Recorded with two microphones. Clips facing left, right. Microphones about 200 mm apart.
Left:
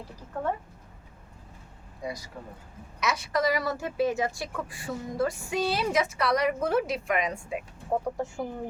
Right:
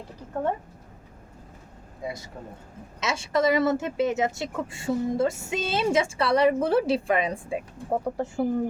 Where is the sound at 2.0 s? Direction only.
25° right (ahead or behind).